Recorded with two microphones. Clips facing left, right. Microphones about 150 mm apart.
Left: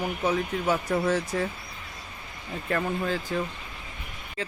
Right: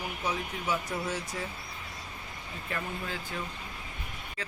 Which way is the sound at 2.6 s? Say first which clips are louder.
Left 9 dB; 55° left (ahead or behind).